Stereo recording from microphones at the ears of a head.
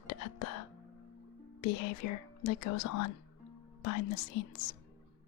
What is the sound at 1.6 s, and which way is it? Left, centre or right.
Speech, left.